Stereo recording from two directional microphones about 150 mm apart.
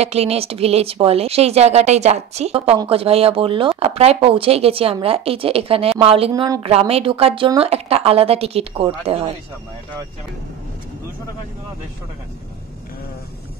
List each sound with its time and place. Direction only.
0.0 s a woman's voice: 45° right (ahead or behind)